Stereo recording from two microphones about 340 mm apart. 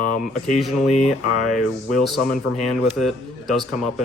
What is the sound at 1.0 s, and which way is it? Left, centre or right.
Speech, centre.